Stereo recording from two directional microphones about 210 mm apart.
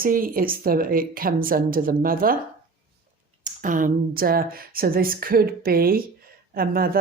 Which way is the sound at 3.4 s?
40° right (ahead or behind).